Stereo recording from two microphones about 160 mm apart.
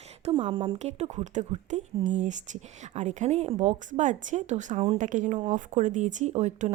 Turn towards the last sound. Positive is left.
turn(degrees=-45)  # may be behind; listen again after turning